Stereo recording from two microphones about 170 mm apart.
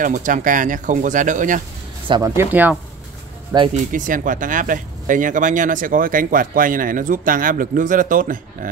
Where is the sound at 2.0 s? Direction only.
30° right (ahead or behind).